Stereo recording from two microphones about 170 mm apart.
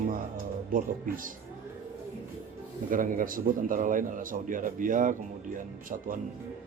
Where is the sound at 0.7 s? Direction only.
55° right (ahead or behind).